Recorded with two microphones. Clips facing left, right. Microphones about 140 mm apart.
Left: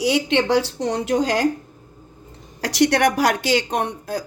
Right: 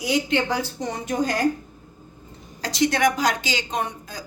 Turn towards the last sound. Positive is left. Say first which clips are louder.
# left 5 dB
turn(degrees=65)  # may be behind; listen again after turning